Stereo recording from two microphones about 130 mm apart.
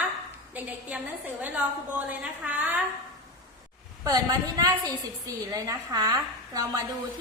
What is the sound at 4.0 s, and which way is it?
A woman's voice, 30° right (ahead or behind).